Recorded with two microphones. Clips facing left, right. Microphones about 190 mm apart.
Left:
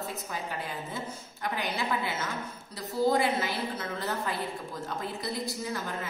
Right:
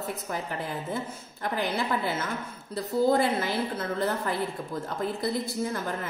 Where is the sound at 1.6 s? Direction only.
55° right (ahead or behind).